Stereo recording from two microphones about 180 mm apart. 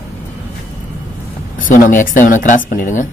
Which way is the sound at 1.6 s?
50° left (ahead or behind).